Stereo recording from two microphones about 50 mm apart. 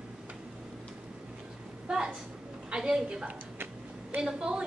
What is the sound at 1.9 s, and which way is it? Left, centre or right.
A woman's voice, centre.